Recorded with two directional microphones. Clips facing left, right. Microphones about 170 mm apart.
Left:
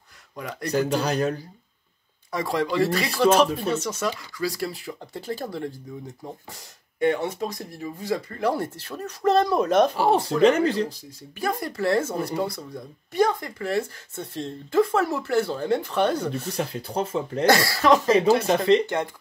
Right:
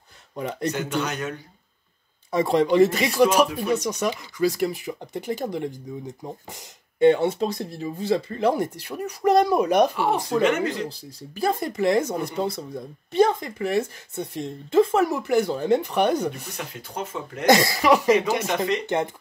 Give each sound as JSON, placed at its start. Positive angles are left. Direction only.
{"t": 0.4, "sound": "speech", "side_deg": -25}
{"t": 0.7, "sound": "speech", "side_deg": 35}
{"t": 2.3, "sound": "speech", "side_deg": -25}
{"t": 9.9, "sound": "speech", "side_deg": 30}
{"t": 10.9, "sound": "speech", "side_deg": -30}
{"t": 16.5, "sound": "speech", "side_deg": 35}
{"t": 17.5, "sound": "speech", "side_deg": -20}